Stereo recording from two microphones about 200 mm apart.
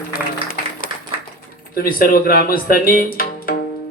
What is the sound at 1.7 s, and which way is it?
A man's voice, 45° left (ahead or behind).